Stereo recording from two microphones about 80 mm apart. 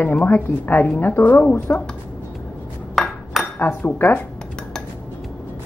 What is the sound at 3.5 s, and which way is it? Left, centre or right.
Speech, left.